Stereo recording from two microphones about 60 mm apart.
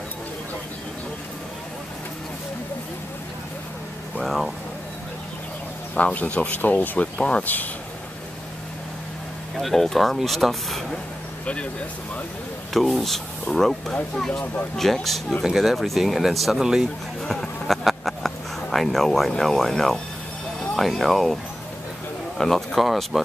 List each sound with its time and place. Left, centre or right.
4.2 s vehicle: centre
5.9 s speech: left
9.6 s speech: centre
12.7 s speech: centre
17.2 s a sound: centre
18.7 s speech: centre
22.4 s speech: centre